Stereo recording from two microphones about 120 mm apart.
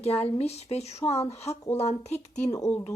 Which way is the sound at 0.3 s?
60° left (ahead or behind).